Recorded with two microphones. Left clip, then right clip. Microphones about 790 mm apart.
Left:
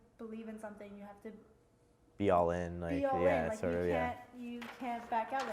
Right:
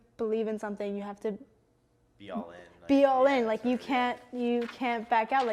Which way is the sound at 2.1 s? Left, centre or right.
Left.